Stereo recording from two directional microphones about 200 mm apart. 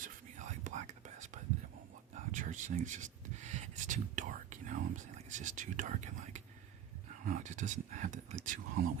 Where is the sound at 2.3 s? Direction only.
40° right (ahead or behind).